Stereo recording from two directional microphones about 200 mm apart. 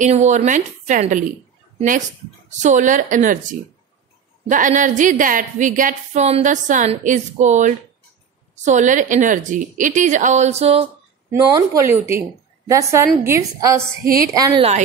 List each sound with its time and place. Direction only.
0.0 s a woman's voice: 35° right (ahead or behind)
11.8 s a woman's voice: 10° right (ahead or behind)